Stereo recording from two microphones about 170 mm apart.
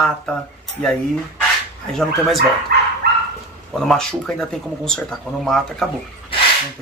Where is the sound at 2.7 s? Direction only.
70° right (ahead or behind).